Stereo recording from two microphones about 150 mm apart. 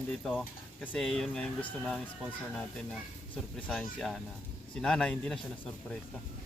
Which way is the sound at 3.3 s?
5° left (ahead or behind).